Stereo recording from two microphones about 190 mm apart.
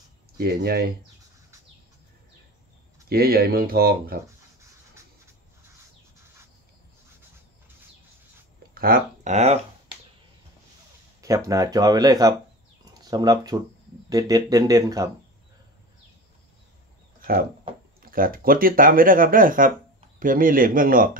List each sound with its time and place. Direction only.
0.4 s speech: 55° right (ahead or behind)
3.1 s speech: 55° right (ahead or behind)
4.6 s a sound: 15° right (ahead or behind)
8.7 s speech: 50° right (ahead or behind)
11.1 s speech: 15° right (ahead or behind)
12.8 s a sound: 20° right (ahead or behind)
14.0 s speech: 20° right (ahead or behind)
17.2 s a sound: 50° right (ahead or behind)
18.0 s speech: 50° right (ahead or behind)